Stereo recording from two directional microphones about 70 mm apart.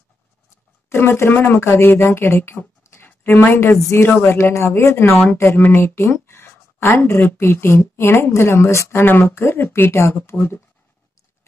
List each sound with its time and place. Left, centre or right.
0.8 s speech: left
5.9 s speech: left
9.0 s speech: left